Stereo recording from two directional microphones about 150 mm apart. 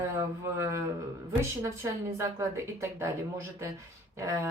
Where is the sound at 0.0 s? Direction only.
15° right (ahead or behind).